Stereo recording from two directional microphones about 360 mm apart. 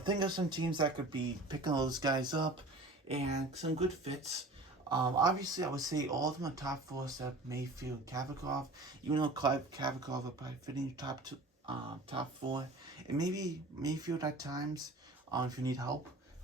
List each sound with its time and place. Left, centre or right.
0.0 s speech: centre